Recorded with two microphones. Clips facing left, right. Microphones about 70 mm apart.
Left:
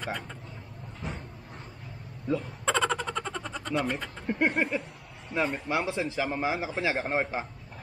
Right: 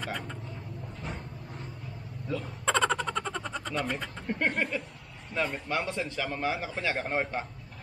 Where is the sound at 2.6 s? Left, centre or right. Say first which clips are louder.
Right 3 dB; centre.